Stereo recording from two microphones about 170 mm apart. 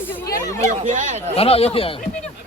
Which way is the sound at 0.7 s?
45° right (ahead or behind).